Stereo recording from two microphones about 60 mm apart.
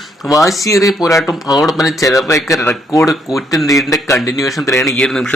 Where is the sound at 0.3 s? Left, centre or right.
Left.